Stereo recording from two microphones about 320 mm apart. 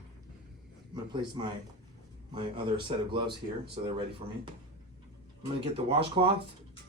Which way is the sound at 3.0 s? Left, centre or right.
Centre.